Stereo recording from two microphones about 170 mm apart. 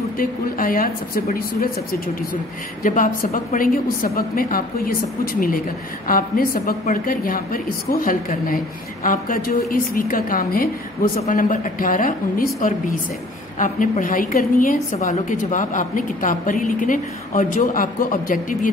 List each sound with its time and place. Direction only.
0.2 s a woman's voice: 55° left (ahead or behind)
2.8 s a woman's voice: 50° left (ahead or behind)